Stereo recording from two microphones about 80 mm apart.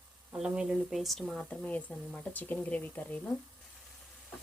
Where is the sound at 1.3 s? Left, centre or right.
Centre.